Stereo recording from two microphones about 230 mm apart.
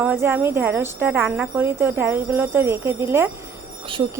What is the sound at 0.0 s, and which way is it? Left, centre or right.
Speech, centre.